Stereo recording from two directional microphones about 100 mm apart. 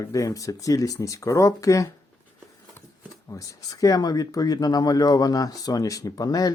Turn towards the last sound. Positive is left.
turn(degrees=40)  # may be behind; listen again after turning